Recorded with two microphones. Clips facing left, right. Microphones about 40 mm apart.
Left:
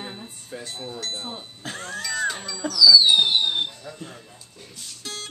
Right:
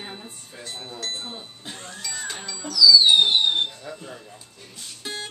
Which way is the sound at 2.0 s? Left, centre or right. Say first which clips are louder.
Left 8 dB; centre.